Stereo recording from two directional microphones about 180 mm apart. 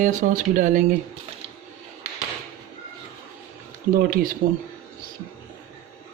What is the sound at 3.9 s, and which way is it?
Speech, 55° right (ahead or behind).